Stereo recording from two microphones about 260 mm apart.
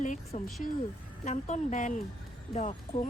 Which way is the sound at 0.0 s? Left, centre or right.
Left.